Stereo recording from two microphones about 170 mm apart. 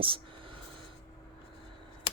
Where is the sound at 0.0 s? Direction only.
30° right (ahead or behind).